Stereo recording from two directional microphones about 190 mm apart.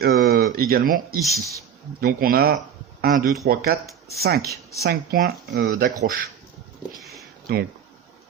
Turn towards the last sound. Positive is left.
turn(degrees=-55)  # may be behind; listen again after turning